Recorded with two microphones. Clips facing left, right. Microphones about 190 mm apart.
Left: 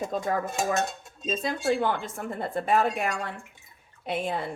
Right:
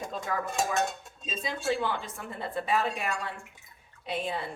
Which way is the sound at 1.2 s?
45° left (ahead or behind).